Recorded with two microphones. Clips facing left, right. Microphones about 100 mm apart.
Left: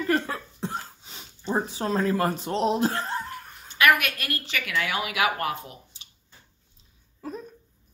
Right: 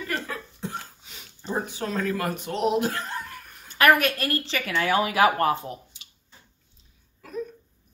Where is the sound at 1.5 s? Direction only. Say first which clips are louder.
Left 3 dB; 30° left (ahead or behind).